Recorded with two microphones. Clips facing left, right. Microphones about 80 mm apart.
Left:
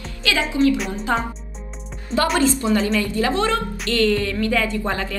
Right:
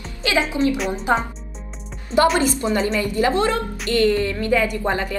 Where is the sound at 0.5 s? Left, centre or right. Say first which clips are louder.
Left 2 dB; right.